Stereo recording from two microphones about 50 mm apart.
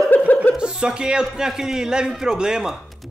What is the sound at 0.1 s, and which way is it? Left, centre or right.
Chuckle, left.